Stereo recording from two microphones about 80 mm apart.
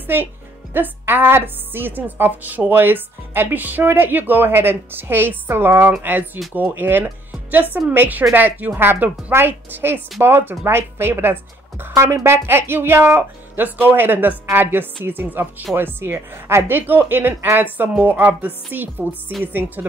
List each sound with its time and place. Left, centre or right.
0.0 s a woman's voice: right